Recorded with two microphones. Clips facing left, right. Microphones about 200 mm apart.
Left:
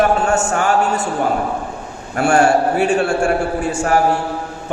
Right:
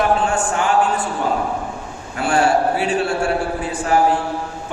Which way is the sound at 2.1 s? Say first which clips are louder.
Left 3 dB; 45° left (ahead or behind).